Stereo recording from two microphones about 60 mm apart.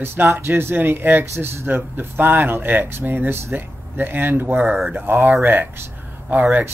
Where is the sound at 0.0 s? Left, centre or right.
Right.